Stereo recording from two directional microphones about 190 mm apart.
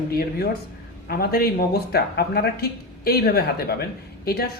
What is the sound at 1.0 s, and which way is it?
Speech, 55° left (ahead or behind).